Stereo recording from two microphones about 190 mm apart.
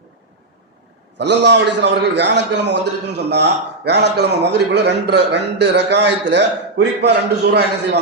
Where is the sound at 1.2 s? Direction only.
65° right (ahead or behind).